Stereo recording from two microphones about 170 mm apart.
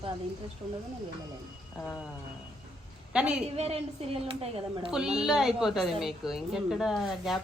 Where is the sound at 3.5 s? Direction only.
35° right (ahead or behind).